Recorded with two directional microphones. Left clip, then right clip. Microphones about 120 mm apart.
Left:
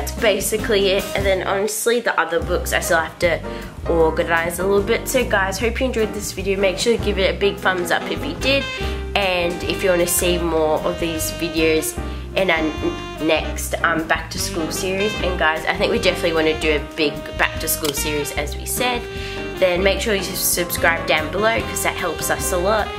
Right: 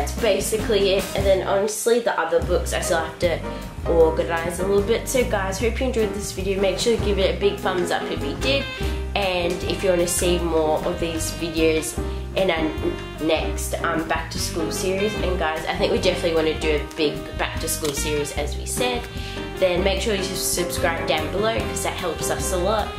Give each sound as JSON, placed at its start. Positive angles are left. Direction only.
{"t": 0.2, "sound": "speech", "side_deg": 35}
{"t": 12.6, "sound": "speech", "side_deg": 5}
{"t": 13.3, "sound": "speech", "side_deg": 35}
{"t": 15.0, "sound": "speech", "side_deg": 5}
{"t": 15.3, "sound": "speech", "side_deg": 35}